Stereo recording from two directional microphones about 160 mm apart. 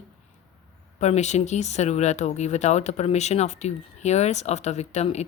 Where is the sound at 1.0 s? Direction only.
45° left (ahead or behind).